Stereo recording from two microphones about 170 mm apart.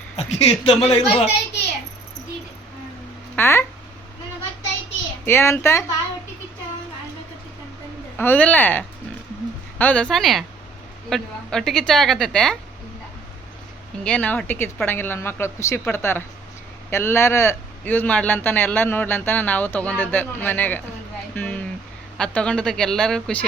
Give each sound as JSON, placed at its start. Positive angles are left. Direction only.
{"t": 0.2, "sound": "speech", "side_deg": 40}
{"t": 3.3, "sound": "speech", "side_deg": 15}
{"t": 5.2, "sound": "speech", "side_deg": 15}
{"t": 8.2, "sound": "a woman's voice", "side_deg": 10}
{"t": 14.0, "sound": "speech", "side_deg": 5}
{"t": 21.3, "sound": "a sound", "side_deg": 10}
{"t": 22.2, "sound": "a woman's voice", "side_deg": 5}